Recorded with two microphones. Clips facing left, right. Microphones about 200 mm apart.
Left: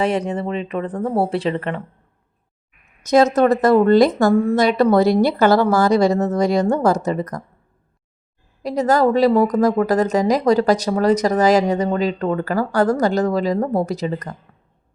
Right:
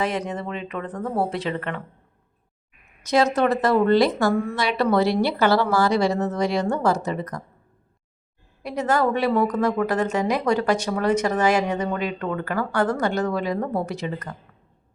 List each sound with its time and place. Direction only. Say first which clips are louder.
0.0 s speech: left 6 dB; 30° left (ahead or behind)
3.0 s a woman's voice: left 6 dB; 45° left (ahead or behind)
8.6 s a woman's voice: left 6 dB; 40° left (ahead or behind)